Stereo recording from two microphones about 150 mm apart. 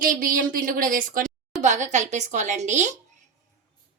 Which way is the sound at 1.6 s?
55° right (ahead or behind).